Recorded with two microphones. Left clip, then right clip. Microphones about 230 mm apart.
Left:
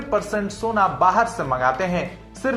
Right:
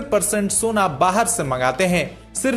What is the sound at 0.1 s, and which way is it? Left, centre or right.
A man's voice, right.